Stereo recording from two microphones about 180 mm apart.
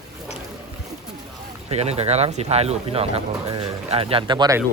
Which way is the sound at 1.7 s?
35° right (ahead or behind).